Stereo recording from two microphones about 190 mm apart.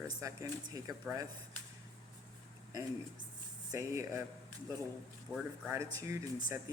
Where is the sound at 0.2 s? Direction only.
20° right (ahead or behind).